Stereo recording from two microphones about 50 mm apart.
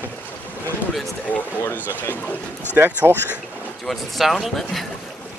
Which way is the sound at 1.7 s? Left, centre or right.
Left.